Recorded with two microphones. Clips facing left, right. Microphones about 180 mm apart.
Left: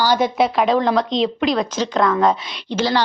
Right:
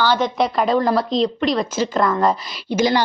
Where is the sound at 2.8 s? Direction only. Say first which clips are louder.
Right 2 dB; 10° right (ahead or behind).